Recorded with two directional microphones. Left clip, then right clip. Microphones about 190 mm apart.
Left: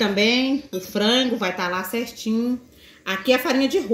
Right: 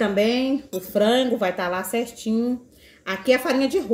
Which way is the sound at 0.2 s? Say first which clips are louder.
Left 1 dB; 30° left (ahead or behind).